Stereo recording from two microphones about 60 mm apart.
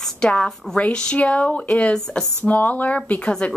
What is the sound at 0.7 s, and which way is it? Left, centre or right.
A woman's voice, centre.